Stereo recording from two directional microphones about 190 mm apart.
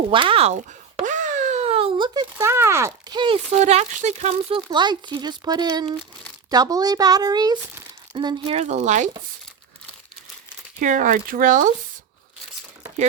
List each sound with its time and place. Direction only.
0.1 s a sound: 25° right (ahead or behind)
2.4 s speech: 15° right (ahead or behind)
8.5 s speech: 35° right (ahead or behind)
10.8 s speech: 45° right (ahead or behind)